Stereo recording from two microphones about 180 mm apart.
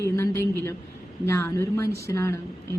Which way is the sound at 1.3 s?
15° left (ahead or behind).